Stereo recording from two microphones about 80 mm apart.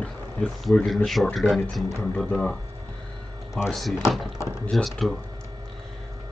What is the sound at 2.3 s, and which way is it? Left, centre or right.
Speech, centre.